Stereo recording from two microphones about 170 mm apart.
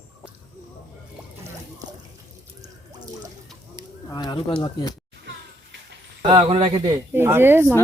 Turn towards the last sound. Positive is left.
turn(degrees=-15)  # may be behind; listen again after turning